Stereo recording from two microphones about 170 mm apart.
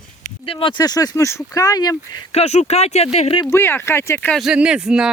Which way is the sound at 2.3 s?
40° left (ahead or behind).